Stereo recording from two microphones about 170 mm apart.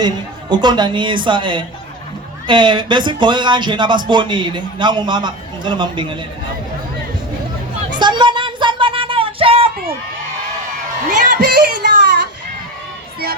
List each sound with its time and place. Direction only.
0.5 s speech: 25° right (ahead or behind)
7.9 s music: 25° right (ahead or behind)
11.3 s a sound: 65° right (ahead or behind)